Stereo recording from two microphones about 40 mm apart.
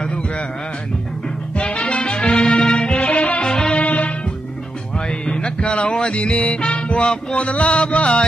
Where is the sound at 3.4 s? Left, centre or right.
Centre.